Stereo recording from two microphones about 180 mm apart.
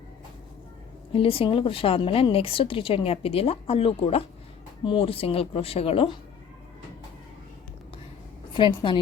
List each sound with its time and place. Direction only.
1.1 s a woman's voice: 30° left (ahead or behind)
8.5 s a woman's voice: 25° left (ahead or behind)